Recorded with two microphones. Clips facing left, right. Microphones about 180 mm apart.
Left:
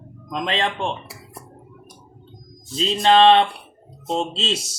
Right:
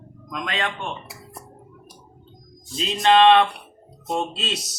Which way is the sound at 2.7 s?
30° left (ahead or behind).